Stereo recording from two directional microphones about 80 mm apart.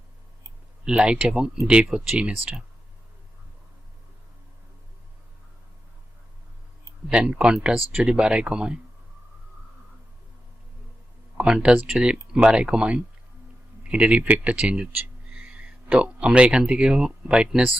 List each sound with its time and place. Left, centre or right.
0.9 s speech: centre
7.1 s speech: centre
11.3 s speech: centre